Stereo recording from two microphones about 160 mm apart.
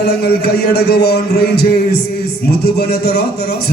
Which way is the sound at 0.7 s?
90° left.